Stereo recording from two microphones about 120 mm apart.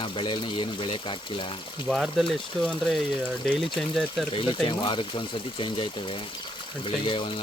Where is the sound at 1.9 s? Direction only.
Centre (ahead or behind).